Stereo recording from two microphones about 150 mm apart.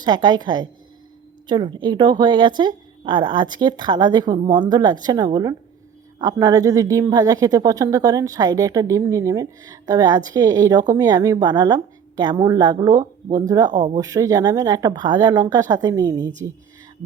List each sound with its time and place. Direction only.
0.0 s speech: 30° right (ahead or behind)